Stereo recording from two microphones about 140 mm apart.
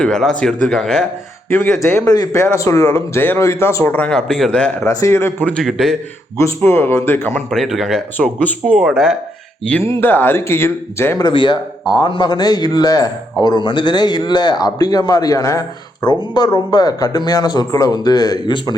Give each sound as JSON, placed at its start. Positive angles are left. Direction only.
{"t": 0.0, "sound": "speech", "side_deg": 5}
{"t": 1.5, "sound": "speech", "side_deg": 15}
{"t": 4.9, "sound": "speech", "side_deg": 20}
{"t": 6.4, "sound": "speech", "side_deg": 15}
{"t": 7.5, "sound": "speech", "side_deg": 0}
{"t": 9.6, "sound": "speech", "side_deg": 10}
{"t": 11.3, "sound": "speech", "side_deg": 35}